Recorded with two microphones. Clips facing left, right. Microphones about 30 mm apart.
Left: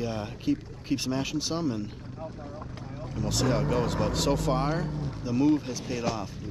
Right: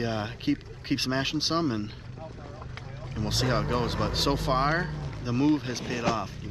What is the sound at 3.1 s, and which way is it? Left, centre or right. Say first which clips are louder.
Speech: even; right.